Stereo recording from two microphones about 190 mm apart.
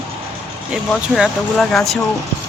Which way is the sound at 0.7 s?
Centre (ahead or behind).